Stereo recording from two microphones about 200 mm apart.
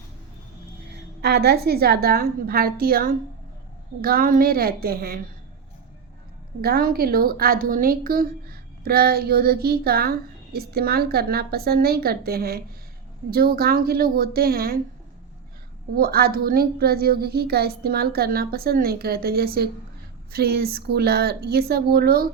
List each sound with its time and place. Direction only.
0.9 s a woman's voice: 55° right (ahead or behind)
6.6 s a woman's voice: 50° right (ahead or behind)
16.0 s a woman's voice: 50° right (ahead or behind)